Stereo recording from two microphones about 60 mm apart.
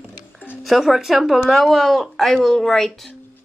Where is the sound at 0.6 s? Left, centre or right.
Centre.